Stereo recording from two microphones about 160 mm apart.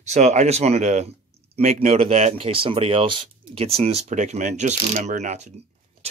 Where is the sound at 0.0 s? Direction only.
45° right (ahead or behind).